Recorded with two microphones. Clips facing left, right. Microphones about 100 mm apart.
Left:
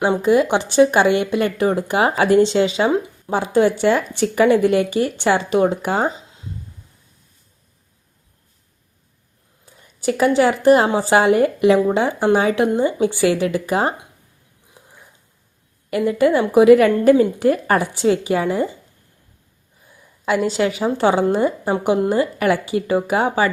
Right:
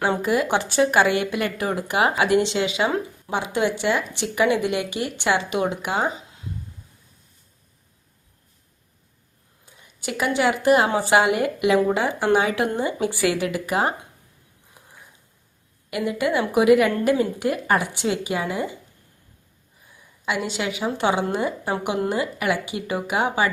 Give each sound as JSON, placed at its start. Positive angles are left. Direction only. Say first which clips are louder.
{"t": 0.0, "sound": "speech", "louder": "left 6 dB", "side_deg": 25}
{"t": 10.0, "sound": "speech", "louder": "left 7 dB", "side_deg": 35}
{"t": 15.9, "sound": "speech", "louder": "left 7 dB", "side_deg": 35}
{"t": 20.2, "sound": "speech", "louder": "left 7 dB", "side_deg": 40}